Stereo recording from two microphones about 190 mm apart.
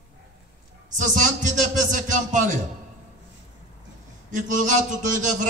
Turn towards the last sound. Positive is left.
turn(degrees=-40)  # may be behind; listen again after turning